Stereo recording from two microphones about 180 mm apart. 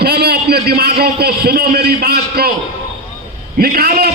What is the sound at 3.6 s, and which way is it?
Speech, 60° right (ahead or behind).